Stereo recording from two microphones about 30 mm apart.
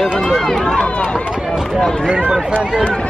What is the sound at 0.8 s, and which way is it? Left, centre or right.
Speech, left.